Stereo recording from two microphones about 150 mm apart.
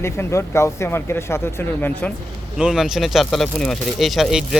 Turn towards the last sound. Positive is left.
turn(degrees=0)  # may be behind; listen again after turning